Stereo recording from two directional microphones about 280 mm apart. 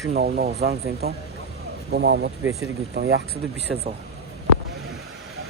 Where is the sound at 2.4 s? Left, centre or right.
Centre.